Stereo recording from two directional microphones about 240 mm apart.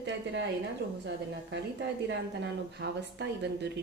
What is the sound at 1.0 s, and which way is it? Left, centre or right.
Speech, right.